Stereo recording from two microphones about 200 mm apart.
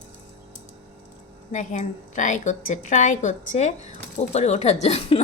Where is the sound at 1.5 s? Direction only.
40° left (ahead or behind).